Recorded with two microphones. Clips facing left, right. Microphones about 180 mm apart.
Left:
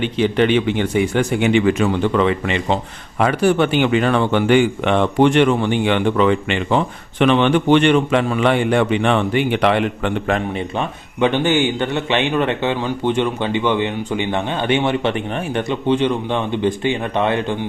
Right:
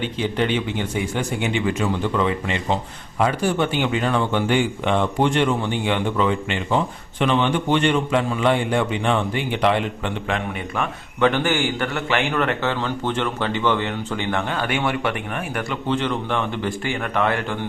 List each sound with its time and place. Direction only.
0.0 s speech: 75° left (ahead or behind)
10.8 s speech: 20° left (ahead or behind)